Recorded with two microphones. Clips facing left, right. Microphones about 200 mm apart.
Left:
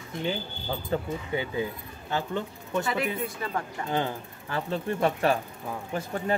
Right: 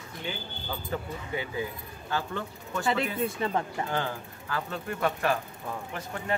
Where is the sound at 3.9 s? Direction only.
20° left (ahead or behind).